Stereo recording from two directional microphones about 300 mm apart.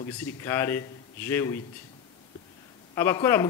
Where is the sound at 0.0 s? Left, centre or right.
Centre.